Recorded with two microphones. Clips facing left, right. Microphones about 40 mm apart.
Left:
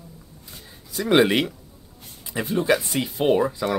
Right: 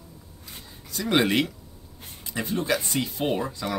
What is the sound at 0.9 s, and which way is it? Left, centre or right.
Speech, centre.